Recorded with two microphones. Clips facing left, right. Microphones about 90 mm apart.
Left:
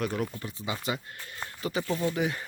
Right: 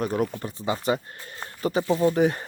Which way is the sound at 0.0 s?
40° right (ahead or behind).